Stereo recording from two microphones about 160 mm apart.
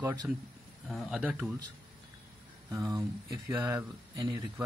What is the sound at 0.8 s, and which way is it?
Speech, centre (ahead or behind).